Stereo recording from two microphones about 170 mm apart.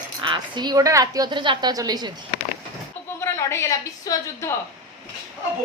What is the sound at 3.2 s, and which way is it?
A woman's voice, 15° left (ahead or behind).